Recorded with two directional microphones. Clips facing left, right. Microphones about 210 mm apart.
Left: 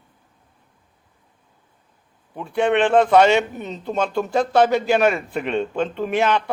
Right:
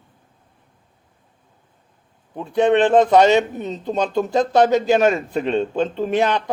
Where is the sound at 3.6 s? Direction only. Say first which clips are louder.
Right 2 dB; 20° right (ahead or behind).